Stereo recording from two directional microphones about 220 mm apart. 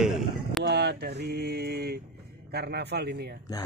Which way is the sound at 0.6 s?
50° right (ahead or behind).